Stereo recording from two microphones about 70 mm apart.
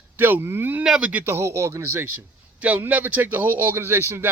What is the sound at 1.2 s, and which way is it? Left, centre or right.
Speech, right.